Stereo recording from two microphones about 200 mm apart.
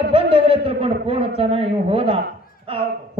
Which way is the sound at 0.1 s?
25° right (ahead or behind).